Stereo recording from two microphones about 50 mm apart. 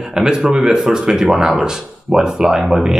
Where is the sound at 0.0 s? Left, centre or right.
Centre.